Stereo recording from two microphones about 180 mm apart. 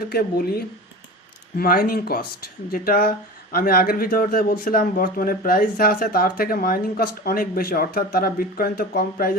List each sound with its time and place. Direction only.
0.1 s speech: 55° left (ahead or behind)